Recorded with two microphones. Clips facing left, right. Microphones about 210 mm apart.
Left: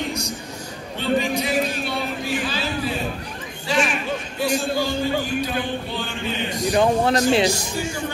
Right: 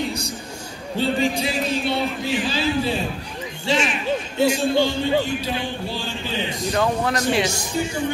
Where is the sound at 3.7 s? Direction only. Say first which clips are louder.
Right 1 dB; 25° right (ahead or behind).